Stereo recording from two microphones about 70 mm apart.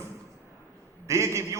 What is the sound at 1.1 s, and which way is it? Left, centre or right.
Speech, right.